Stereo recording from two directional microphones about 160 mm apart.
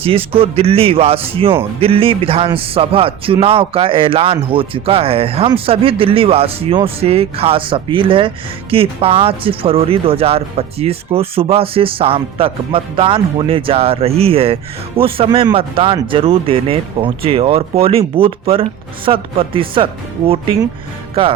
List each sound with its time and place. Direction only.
0.0 s speech: 35° right (ahead or behind)